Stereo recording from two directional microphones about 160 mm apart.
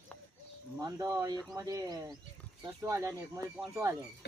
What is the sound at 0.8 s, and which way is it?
Speech, 20° right (ahead or behind).